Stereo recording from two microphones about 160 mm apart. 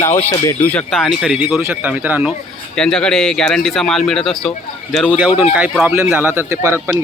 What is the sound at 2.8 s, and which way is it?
A man's voice, 5° left (ahead or behind).